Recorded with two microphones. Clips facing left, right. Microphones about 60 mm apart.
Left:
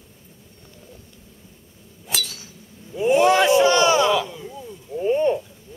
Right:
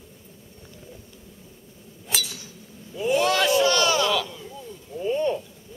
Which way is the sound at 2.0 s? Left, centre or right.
Centre.